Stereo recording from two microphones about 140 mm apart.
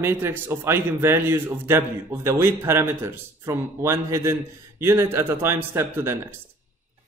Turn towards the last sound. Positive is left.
turn(degrees=-15)  # may be behind; listen again after turning